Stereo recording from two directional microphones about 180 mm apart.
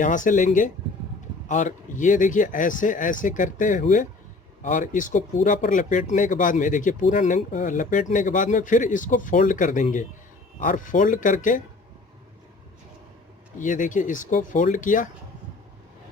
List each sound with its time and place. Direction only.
0.0 s speech: 45° left (ahead or behind)
13.6 s speech: 45° left (ahead or behind)